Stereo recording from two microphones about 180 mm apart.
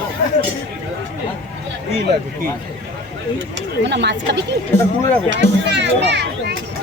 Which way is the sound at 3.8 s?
75° right (ahead or behind).